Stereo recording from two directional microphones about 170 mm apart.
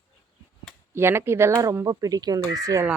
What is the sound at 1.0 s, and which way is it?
Speech, 15° right (ahead or behind).